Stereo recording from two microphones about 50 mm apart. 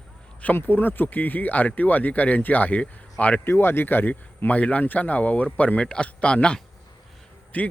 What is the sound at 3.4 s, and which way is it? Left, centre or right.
Speech, left.